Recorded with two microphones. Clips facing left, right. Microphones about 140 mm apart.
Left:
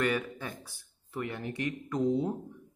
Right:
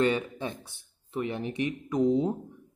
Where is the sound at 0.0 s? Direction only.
25° right (ahead or behind).